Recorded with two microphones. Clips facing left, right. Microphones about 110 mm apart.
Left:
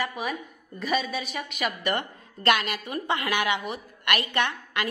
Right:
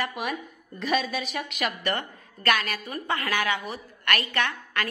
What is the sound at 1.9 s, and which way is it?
A woman's voice, 20° left (ahead or behind).